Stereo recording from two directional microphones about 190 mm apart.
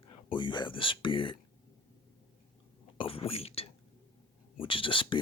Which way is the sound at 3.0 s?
30° left (ahead or behind).